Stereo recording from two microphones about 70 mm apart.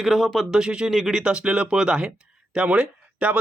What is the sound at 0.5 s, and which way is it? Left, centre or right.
Speech, centre.